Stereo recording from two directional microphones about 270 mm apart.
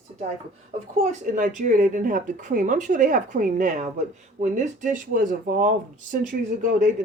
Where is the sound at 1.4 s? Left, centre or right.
Right.